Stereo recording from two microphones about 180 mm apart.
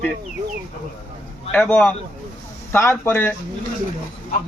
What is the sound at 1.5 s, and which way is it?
A man's voice, 10° left (ahead or behind).